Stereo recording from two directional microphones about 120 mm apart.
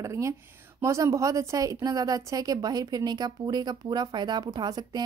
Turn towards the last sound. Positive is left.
turn(degrees=-35)  # may be behind; listen again after turning